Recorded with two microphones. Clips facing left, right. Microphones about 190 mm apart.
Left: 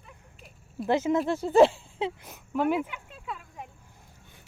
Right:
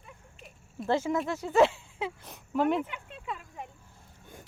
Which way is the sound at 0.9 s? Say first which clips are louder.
Left 3 dB; 20° left (ahead or behind).